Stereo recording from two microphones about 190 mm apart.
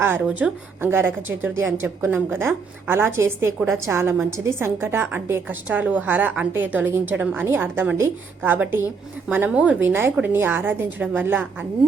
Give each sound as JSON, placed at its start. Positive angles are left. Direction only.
{"t": 0.0, "sound": "a woman's voice", "side_deg": -10}